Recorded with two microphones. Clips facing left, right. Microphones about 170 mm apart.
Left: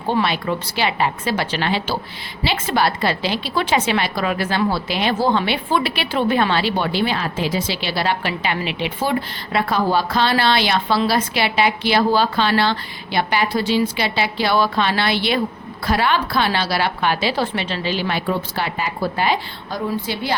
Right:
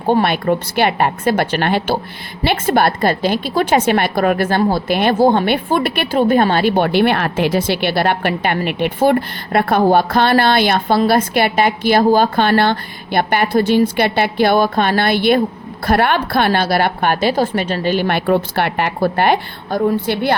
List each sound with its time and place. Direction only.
0.1 s a woman's voice: 50° right (ahead or behind)